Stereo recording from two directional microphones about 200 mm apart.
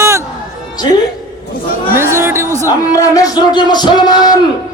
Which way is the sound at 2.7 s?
15° left (ahead or behind).